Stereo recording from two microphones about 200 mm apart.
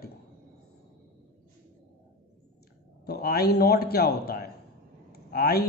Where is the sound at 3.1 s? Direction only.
50° left (ahead or behind).